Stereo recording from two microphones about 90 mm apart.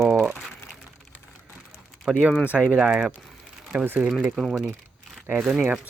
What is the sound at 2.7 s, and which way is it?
Speech, 5° right (ahead or behind).